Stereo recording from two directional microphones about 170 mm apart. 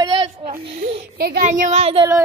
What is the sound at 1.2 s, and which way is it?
Speech, 55° right (ahead or behind).